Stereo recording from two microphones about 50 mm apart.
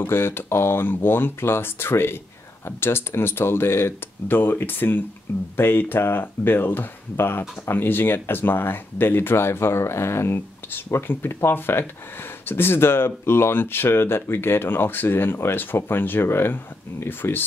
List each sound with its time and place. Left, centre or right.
0.0 s speech: left